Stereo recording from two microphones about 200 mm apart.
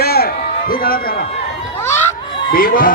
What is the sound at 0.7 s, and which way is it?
Speech, 50° left (ahead or behind).